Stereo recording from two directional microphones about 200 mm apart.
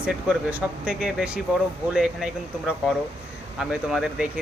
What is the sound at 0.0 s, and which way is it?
Speech, 5° right (ahead or behind).